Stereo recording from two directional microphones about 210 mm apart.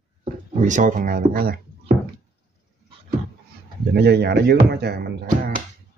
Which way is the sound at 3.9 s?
50° right (ahead or behind).